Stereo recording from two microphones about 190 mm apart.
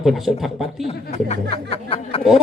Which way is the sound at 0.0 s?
Centre (ahead or behind).